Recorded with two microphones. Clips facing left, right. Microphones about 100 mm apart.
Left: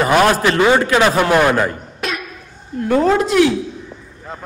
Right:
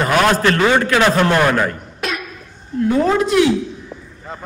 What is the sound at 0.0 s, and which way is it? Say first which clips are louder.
A man's voice: left 1 dB; 10° left (ahead or behind).